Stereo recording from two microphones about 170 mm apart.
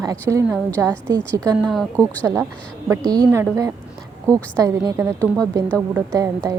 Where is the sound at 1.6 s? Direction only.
Centre (ahead or behind).